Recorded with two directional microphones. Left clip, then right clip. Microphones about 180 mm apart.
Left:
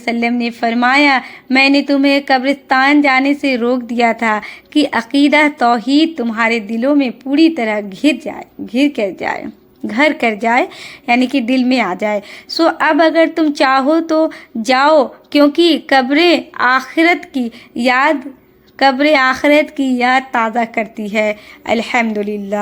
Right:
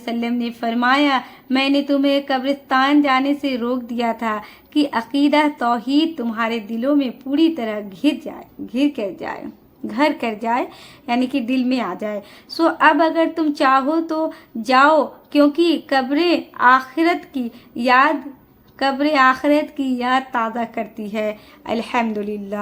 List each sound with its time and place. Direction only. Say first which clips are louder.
0.0 s a woman's voice: left 7 dB; 25° left (ahead or behind)